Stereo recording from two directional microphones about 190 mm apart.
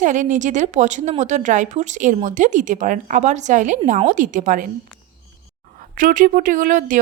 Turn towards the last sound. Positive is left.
turn(degrees=-45)  # may be behind; listen again after turning